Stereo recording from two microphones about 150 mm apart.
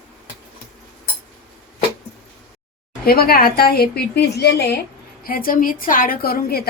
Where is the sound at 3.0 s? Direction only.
85° left.